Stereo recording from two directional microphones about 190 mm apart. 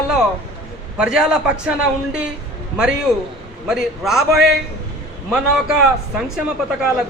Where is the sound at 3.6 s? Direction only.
5° right (ahead or behind).